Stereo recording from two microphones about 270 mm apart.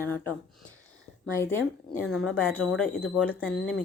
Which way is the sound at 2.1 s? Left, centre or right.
Centre.